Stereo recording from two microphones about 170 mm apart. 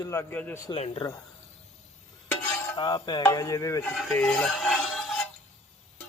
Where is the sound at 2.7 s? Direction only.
25° left (ahead or behind).